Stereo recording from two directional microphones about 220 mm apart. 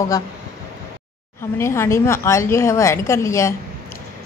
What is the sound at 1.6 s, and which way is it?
A woman's voice, 10° left (ahead or behind).